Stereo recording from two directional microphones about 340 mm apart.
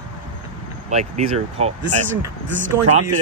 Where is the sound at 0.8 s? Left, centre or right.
Centre.